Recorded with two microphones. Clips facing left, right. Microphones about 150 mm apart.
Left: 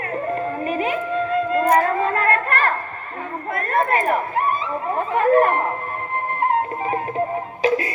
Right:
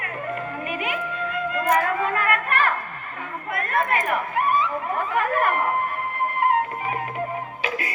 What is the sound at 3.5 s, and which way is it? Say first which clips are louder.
Chatter: left 3 dB; 35° left (ahead or behind).